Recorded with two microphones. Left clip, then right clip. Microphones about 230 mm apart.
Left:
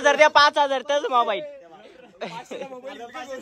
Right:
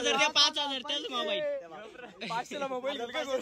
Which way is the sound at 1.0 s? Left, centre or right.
Left.